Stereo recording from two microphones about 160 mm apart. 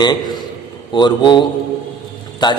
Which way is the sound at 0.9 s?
30° left (ahead or behind).